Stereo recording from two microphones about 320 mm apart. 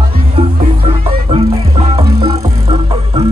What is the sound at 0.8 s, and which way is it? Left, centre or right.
Music, centre.